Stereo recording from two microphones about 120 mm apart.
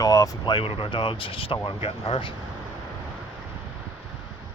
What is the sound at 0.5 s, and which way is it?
Speech, 45° left (ahead or behind).